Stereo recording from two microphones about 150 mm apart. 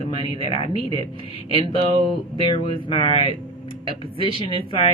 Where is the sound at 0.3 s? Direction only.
35° left (ahead or behind).